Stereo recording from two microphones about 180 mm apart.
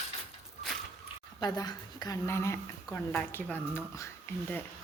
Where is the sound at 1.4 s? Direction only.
20° left (ahead or behind).